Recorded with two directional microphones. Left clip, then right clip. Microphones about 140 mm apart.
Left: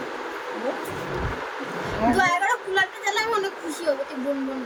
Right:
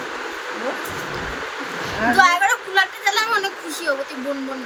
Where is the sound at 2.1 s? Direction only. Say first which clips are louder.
Right 7 dB; 25° left (ahead or behind).